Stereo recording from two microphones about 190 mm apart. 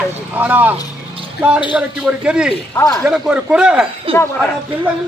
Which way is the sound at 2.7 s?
20° left (ahead or behind).